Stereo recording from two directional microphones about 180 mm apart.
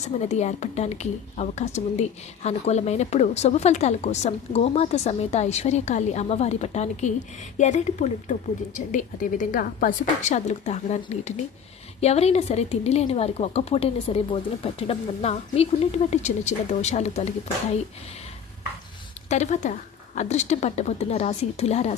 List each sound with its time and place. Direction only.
0.2 s a woman's voice: 40° left (ahead or behind)
19.3 s a woman's voice: 40° left (ahead or behind)